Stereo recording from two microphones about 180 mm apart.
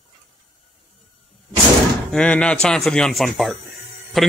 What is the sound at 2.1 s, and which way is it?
Speech, 5° left (ahead or behind).